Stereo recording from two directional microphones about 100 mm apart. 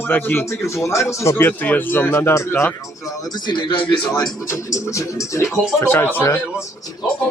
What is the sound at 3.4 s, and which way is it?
Speech, 55° left (ahead or behind).